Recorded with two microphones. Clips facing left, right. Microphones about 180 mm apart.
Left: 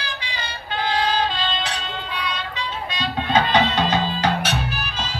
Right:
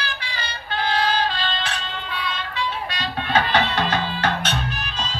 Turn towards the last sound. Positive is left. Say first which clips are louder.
# left 1 dB
turn(degrees=5)  # may be behind; listen again after turning